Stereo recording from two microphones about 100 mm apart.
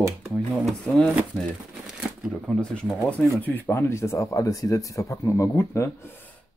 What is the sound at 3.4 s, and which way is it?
Speech, 20° left (ahead or behind).